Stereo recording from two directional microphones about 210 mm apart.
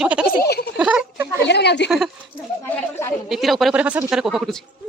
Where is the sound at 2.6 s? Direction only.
10° left (ahead or behind).